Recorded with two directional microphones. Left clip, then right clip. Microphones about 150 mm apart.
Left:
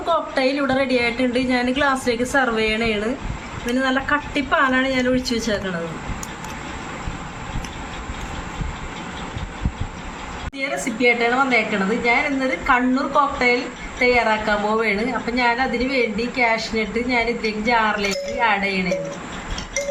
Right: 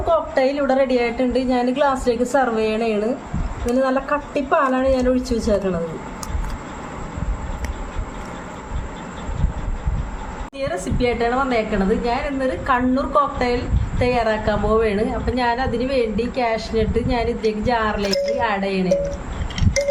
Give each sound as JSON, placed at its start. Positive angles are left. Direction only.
{"t": 0.3, "sound": "a woman's voice", "side_deg": -45}
{"t": 10.6, "sound": "a woman's voice", "side_deg": -45}